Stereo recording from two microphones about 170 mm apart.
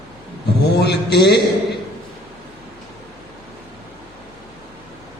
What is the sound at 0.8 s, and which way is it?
Speech, 75° left (ahead or behind).